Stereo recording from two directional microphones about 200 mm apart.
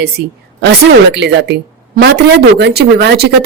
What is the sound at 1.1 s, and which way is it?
A woman's voice, 55° right (ahead or behind).